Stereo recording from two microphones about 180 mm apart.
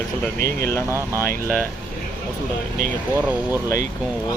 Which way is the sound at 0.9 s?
15° right (ahead or behind).